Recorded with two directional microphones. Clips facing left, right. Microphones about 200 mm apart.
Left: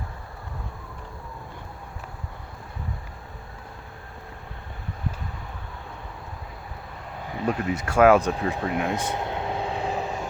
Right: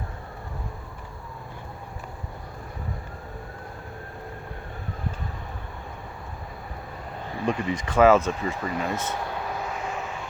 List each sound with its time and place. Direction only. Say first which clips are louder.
7.4 s speech: left 1 dB; 5° left (ahead or behind)
8.7 s vehicle: left 2 dB; 15° left (ahead or behind); by 10.2 s 35° left (ahead or behind)